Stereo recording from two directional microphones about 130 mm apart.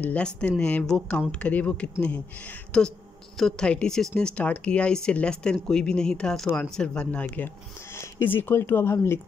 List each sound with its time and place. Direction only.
0.0 s speech: 10° left (ahead or behind)